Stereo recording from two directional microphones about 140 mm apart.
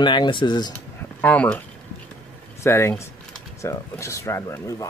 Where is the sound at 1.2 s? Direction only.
10° left (ahead or behind).